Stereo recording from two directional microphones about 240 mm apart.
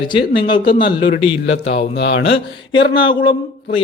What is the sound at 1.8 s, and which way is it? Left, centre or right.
Speech, left.